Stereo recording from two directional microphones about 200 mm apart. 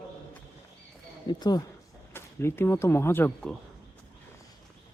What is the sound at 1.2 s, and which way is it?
Speech, 20° left (ahead or behind).